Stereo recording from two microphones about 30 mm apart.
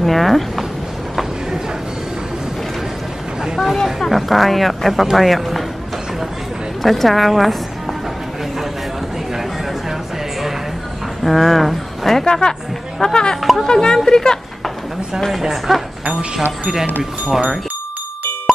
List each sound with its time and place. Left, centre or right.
0.0 s speech: centre
4.1 s speech: centre
6.8 s speech: centre
11.2 s speech: centre
12.3 s speech: left
13.4 s speech: centre
13.7 s speech: left
15.5 s speech: centre